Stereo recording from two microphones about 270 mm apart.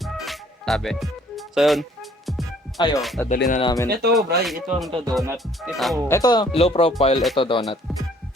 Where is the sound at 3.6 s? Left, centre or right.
Centre.